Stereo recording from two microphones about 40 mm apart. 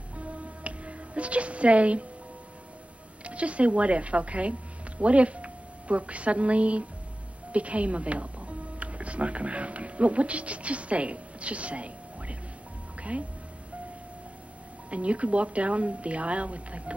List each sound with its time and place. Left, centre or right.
0.2 s music: right
3.3 s speech: right
14.9 s speech: right